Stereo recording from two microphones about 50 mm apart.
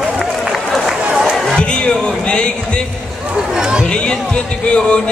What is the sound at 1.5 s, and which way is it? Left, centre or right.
Speech, centre.